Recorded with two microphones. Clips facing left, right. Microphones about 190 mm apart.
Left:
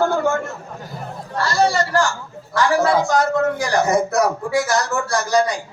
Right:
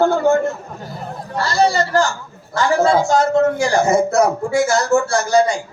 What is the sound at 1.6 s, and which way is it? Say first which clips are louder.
A man's voice: right 2 dB; 20° right (ahead or behind).